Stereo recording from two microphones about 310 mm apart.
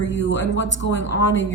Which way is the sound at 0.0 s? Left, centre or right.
Left.